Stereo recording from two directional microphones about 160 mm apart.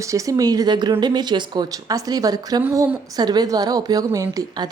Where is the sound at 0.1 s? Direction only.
20° right (ahead or behind).